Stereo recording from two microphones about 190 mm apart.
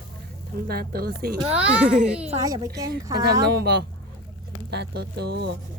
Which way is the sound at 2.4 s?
20° right (ahead or behind).